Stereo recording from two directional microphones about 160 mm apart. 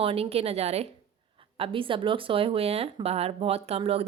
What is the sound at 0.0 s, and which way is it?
Speech, 35° right (ahead or behind).